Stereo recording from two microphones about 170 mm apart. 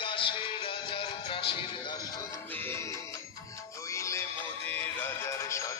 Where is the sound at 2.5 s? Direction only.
15° left (ahead or behind).